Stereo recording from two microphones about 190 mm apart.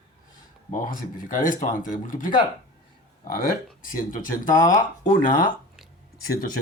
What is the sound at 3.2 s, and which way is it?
Speech, 50° left (ahead or behind).